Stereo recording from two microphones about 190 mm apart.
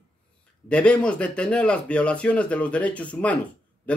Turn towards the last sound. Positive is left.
turn(degrees=5)  # may be behind; listen again after turning